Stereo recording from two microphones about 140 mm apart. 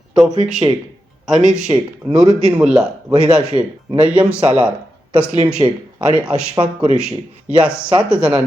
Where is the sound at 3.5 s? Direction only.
35° right (ahead or behind).